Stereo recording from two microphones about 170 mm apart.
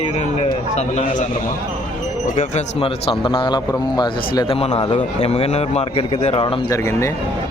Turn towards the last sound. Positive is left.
turn(degrees=15)  # may be behind; listen again after turning